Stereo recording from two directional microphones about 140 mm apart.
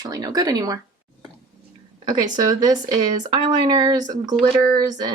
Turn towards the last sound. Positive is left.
turn(degrees=-30)  # may be behind; listen again after turning